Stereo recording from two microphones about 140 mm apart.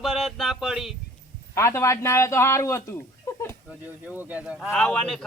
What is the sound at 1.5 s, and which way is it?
A man's voice, 20° left (ahead or behind).